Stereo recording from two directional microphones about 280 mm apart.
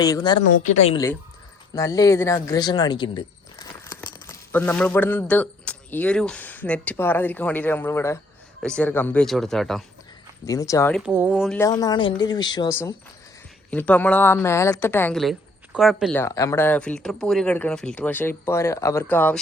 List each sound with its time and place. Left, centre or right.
0.0 s speech: centre
0.6 s a woman's voice: left; by 9.8 s centre
10.4 s speech: centre
11.0 s a woman's voice: centre